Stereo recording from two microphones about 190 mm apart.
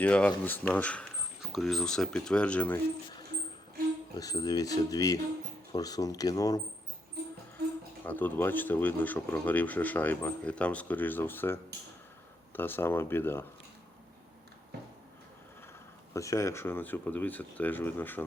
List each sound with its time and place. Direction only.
0.0 s speech: 5° left (ahead or behind)
4.2 s speech: 20° left (ahead or behind)
8.0 s speech: 10° left (ahead or behind)
16.1 s speech: 15° left (ahead or behind)